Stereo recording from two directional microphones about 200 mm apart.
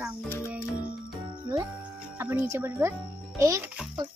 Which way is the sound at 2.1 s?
10° right (ahead or behind).